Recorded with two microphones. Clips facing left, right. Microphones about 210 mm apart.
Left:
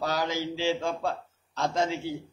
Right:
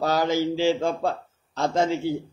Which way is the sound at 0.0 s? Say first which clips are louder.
Right 6 dB; 50° right (ahead or behind).